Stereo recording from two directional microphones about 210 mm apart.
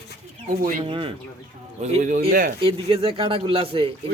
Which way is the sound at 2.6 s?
25° right (ahead or behind).